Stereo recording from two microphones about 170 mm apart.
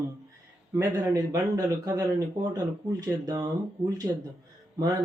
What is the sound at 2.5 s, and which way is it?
Speech, 20° right (ahead or behind).